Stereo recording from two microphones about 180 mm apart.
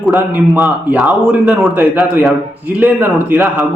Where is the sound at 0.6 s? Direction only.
5° right (ahead or behind).